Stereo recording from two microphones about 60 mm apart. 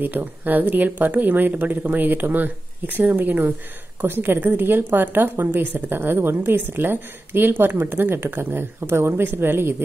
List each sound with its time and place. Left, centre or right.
0.0 s a woman's voice: right